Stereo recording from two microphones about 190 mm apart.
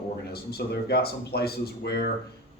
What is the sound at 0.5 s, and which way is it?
A man's voice, 55° left (ahead or behind).